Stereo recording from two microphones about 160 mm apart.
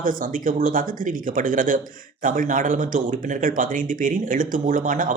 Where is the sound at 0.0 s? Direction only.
60° right (ahead or behind).